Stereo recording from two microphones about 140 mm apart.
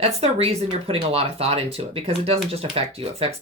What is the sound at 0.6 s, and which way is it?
Speech, 30° right (ahead or behind).